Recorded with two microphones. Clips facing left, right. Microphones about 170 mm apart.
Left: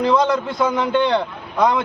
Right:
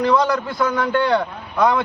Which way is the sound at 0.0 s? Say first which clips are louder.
Left 1 dB; 20° left (ahead or behind).